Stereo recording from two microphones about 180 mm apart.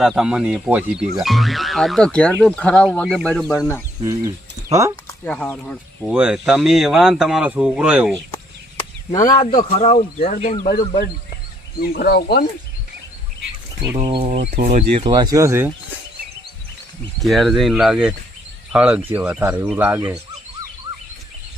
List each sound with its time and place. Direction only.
0.0 s speech: centre (ahead or behind)
4.0 s speech: 20° right (ahead or behind)
5.0 s speech: 10° left (ahead or behind)
6.1 s speech: 5° right (ahead or behind)
8.8 s a sound: 45° left (ahead or behind)
9.7 s speech: 35° left (ahead or behind)
10.7 s speech: 55° left (ahead or behind)
14.0 s speech: 30° right (ahead or behind)
17.2 s speech: centre (ahead or behind)